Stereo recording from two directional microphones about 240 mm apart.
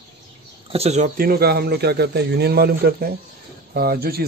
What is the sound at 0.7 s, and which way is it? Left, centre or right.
Speech, right.